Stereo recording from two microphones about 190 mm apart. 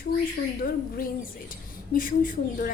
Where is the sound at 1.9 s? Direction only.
45° left (ahead or behind).